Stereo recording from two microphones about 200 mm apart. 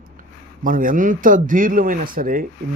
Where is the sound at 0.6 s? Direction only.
45° right (ahead or behind).